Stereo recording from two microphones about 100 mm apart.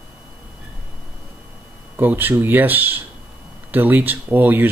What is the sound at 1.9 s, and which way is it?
Speech, 20° right (ahead or behind).